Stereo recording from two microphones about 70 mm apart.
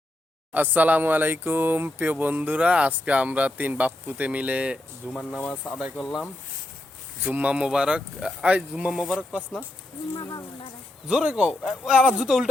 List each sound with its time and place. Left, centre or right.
0.5 s speech: right
7.3 s speech: right
10.2 s speech: left
11.1 s speech: centre